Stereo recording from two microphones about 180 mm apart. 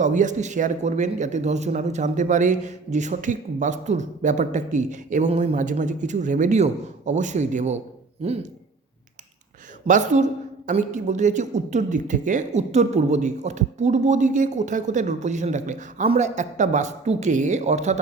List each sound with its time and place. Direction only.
0.0 s a man's voice: 45° right (ahead or behind)
9.8 s a man's voice: 45° right (ahead or behind)